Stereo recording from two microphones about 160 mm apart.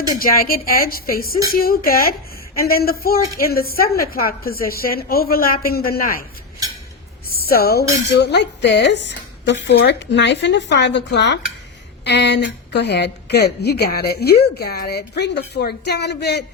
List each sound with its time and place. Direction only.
0.2 s a woman's voice: 65° left (ahead or behind)
7.3 s a woman's voice: 70° left (ahead or behind); by 16.4 s 90° left